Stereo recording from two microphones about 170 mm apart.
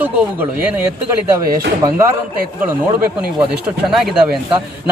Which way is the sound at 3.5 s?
5° right (ahead or behind).